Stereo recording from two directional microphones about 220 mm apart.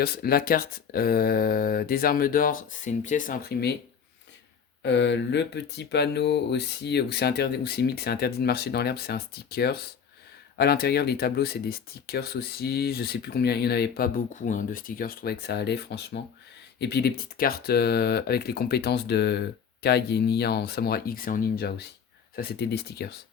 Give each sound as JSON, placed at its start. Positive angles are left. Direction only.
{"t": 0.0, "sound": "speech", "side_deg": 45}
{"t": 4.8, "sound": "speech", "side_deg": 55}